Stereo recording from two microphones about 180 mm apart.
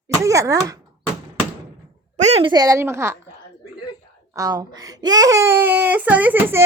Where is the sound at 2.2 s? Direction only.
35° right (ahead or behind).